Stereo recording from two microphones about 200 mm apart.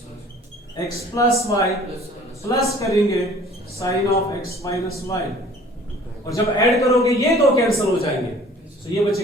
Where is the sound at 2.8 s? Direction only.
15° left (ahead or behind).